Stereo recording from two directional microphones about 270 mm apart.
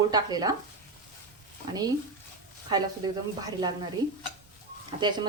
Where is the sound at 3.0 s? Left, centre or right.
Centre.